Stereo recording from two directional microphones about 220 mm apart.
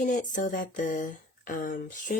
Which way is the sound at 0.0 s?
35° left (ahead or behind).